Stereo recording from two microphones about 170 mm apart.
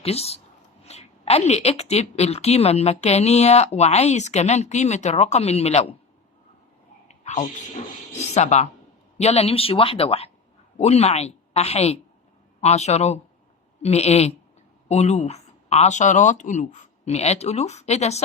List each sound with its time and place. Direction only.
0.0 s a woman's voice: 35° left (ahead or behind)
7.1 s sneeze: 40° left (ahead or behind)
8.3 s a woman's voice: 40° left (ahead or behind)